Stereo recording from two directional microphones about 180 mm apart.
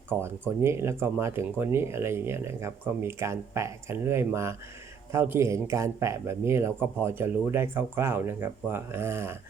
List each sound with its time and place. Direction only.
0.1 s speech: 10° right (ahead or behind)